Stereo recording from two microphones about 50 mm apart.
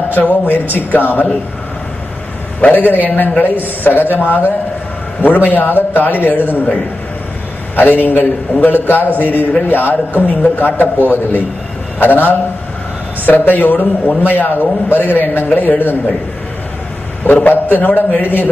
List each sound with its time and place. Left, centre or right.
0.1 s a man's voice: left
2.7 s a man's voice: left
12.0 s a man's voice: left
17.5 s a man's voice: left